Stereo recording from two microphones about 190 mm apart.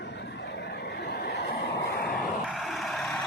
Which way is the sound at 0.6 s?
60° left (ahead or behind).